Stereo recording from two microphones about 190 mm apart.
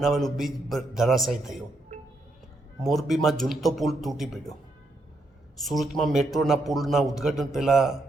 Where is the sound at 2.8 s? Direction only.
Centre (ahead or behind).